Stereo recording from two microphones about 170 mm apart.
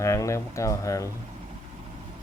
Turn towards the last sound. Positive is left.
turn(degrees=20)  # may be behind; listen again after turning